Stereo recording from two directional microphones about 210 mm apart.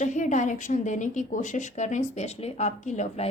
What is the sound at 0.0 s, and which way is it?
A woman's voice, 35° left (ahead or behind).